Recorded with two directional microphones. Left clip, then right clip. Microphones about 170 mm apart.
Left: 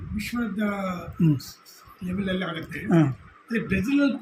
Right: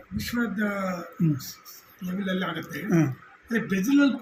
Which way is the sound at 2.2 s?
20° left (ahead or behind).